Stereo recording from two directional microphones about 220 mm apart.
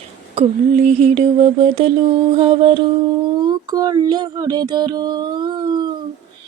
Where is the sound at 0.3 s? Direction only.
30° right (ahead or behind).